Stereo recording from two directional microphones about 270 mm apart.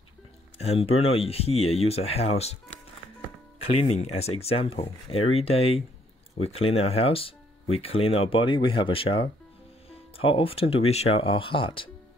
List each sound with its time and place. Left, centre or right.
0.6 s speech: left
3.7 s speech: left